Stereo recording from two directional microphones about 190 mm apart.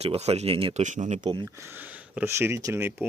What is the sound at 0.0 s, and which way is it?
Speech, 35° right (ahead or behind).